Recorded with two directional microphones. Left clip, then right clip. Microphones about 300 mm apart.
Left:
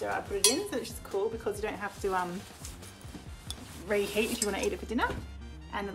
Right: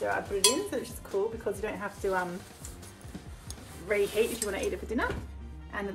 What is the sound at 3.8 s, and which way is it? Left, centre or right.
Speech, centre.